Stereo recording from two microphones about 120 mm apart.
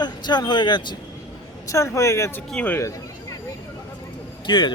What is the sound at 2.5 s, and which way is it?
Speech, 10° left (ahead or behind).